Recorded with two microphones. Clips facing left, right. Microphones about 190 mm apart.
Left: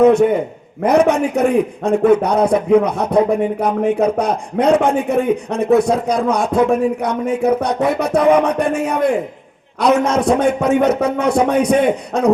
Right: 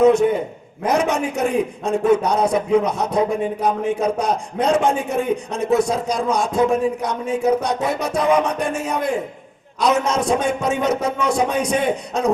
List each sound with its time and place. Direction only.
0.0 s a man's voice: 60° left (ahead or behind)